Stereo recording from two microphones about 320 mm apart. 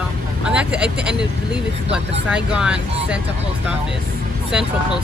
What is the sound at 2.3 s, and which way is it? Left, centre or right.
Speech, centre.